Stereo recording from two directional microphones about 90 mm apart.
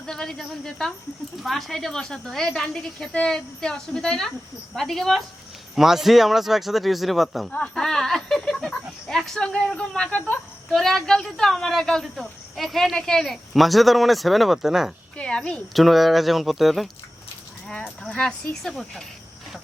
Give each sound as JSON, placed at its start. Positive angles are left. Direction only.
{"t": 0.0, "sound": "speech", "side_deg": 5}
{"t": 15.2, "sound": "speech", "side_deg": 10}
{"t": 15.7, "sound": "speech", "side_deg": 0}